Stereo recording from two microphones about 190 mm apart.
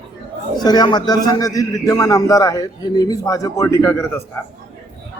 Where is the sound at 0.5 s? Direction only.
20° left (ahead or behind).